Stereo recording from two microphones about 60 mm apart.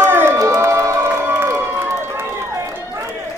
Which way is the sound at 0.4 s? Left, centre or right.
Right.